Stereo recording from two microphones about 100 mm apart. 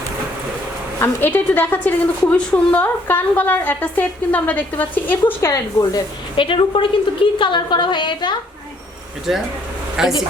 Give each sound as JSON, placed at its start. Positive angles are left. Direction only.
{"t": 0.9, "sound": "a woman's voice", "side_deg": 20}
{"t": 5.4, "sound": "speech", "side_deg": 35}
{"t": 6.3, "sound": "a woman's voice", "side_deg": 60}
{"t": 9.3, "sound": "a woman's voice", "side_deg": -5}